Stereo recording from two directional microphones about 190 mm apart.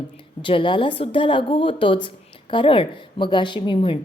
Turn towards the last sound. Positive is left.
turn(degrees=30)  # may be behind; listen again after turning